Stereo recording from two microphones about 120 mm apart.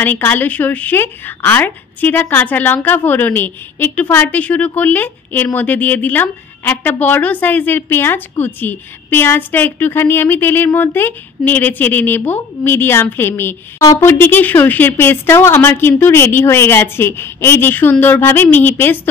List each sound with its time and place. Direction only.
0.0 s a woman's voice: 15° left (ahead or behind)